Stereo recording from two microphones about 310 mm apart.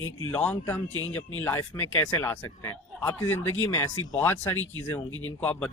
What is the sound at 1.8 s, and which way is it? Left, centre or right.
Speech, left.